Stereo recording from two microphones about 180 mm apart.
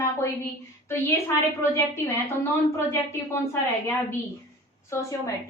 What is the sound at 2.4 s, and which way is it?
A woman's voice, 15° left (ahead or behind).